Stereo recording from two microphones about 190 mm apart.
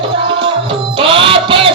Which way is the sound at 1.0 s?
30° right (ahead or behind).